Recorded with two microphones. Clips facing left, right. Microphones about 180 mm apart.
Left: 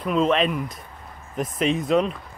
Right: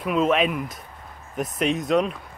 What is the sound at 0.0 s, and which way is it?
Speech, 5° right (ahead or behind).